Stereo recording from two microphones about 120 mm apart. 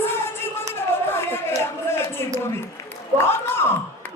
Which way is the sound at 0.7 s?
20° left (ahead or behind).